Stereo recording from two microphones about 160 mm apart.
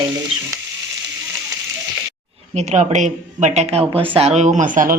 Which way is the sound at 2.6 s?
45° right (ahead or behind).